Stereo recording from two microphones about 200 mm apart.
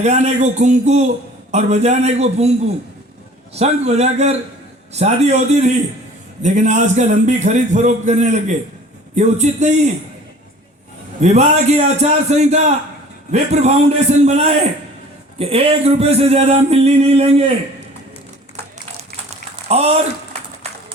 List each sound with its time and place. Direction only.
0.0 s a man's voice: 35° right (ahead or behind)
11.2 s a man's voice: 35° right (ahead or behind)
19.6 s speech: 30° right (ahead or behind)